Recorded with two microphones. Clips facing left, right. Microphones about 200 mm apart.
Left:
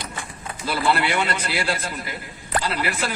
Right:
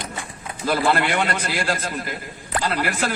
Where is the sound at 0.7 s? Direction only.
50° right (ahead or behind).